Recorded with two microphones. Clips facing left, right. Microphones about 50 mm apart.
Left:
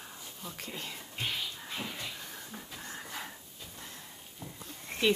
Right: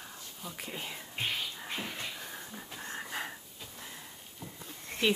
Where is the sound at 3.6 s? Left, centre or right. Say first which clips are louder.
Right 1 dB; centre.